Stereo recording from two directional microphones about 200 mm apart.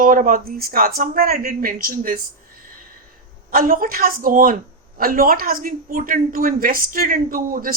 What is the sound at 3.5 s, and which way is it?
A woman's voice, 45° right (ahead or behind).